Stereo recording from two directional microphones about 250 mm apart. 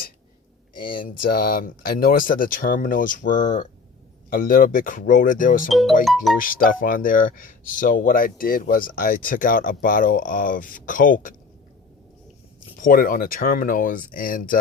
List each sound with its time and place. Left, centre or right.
1.3 s speech: left
12.8 s speech: left